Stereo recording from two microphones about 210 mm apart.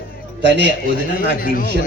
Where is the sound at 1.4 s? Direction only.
45° left (ahead or behind).